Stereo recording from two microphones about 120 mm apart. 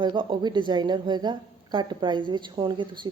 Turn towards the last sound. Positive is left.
turn(degrees=-40)  # may be behind; listen again after turning